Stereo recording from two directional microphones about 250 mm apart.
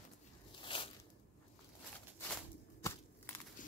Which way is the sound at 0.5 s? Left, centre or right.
Left.